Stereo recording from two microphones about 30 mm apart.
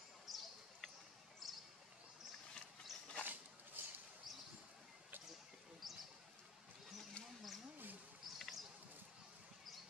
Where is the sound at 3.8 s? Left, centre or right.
Right.